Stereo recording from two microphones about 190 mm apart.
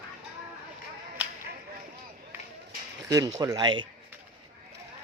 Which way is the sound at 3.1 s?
20° right (ahead or behind).